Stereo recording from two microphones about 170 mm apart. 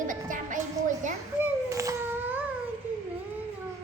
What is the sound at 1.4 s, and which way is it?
Children playing, 20° right (ahead or behind).